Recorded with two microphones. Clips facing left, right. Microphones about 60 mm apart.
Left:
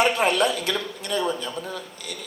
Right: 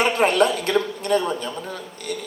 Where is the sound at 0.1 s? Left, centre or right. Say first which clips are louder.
Right 3 dB; right.